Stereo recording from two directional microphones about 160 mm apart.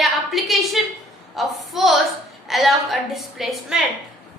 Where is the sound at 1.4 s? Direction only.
Centre (ahead or behind).